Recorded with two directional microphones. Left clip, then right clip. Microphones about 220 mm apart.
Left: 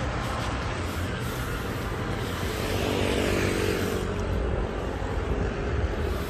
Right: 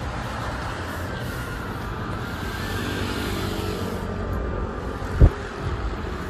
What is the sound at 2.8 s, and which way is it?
Vehicle, 5° right (ahead or behind).